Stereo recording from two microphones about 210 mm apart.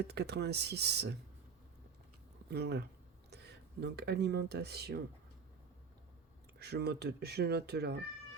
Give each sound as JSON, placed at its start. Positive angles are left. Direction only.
{"t": 0.0, "sound": "speech", "side_deg": -50}
{"t": 2.5, "sound": "speech", "side_deg": -50}
{"t": 6.6, "sound": "speech", "side_deg": -50}